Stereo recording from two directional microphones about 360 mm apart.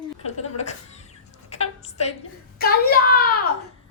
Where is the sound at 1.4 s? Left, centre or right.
Centre.